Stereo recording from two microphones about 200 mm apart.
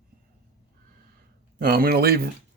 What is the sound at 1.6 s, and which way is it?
Speech, 50° right (ahead or behind).